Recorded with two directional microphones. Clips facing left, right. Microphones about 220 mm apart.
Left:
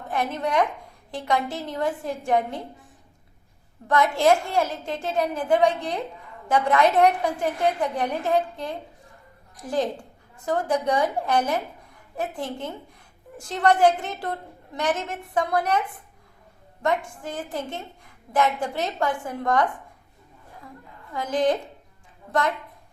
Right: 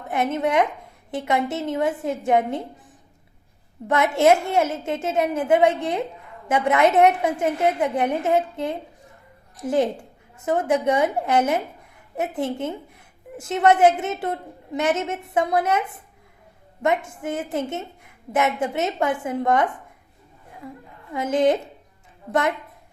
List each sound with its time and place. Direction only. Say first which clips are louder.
0.1 s a woman's voice: right 4 dB; 20° right (ahead or behind)
3.8 s a woman's voice: right 2 dB; 25° right (ahead or behind)
16.8 s a woman's voice: right 3 dB; 20° right (ahead or behind)
21.1 s a woman's voice: right 3 dB; 25° right (ahead or behind)